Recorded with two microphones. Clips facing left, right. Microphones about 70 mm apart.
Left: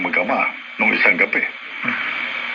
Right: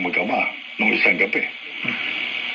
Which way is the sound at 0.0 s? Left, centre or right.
Left.